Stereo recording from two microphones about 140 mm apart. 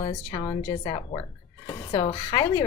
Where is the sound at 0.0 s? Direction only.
30° left (ahead or behind).